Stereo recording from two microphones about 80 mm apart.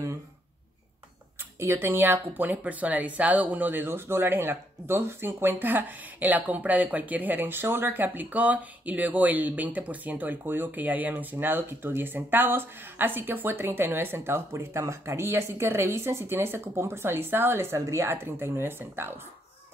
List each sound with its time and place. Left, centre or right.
1.6 s speech: right